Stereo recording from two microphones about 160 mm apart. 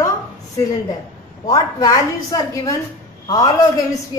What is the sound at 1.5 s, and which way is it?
A woman's voice, 20° left (ahead or behind).